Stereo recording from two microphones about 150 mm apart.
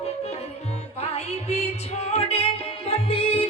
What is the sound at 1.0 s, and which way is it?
Music, 45° left (ahead or behind).